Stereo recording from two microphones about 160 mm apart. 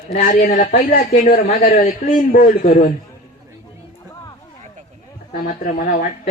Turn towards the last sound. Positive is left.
turn(degrees=60)  # may be behind; listen again after turning